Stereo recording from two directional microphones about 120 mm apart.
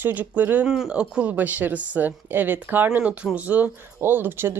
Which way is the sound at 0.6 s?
5° right (ahead or behind).